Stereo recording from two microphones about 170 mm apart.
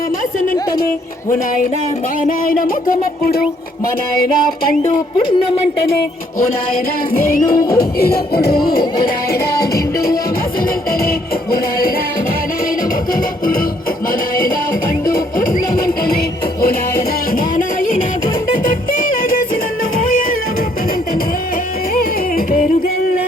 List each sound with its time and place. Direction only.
0.3 s music: 60° left (ahead or behind)
2.2 s music: 55° left (ahead or behind)
4.8 s speech: 30° left (ahead or behind)
7.1 s music: 55° left (ahead or behind)
15.0 s music: 60° left (ahead or behind)
17.3 s music: 55° left (ahead or behind)
21.9 s music: 60° left (ahead or behind)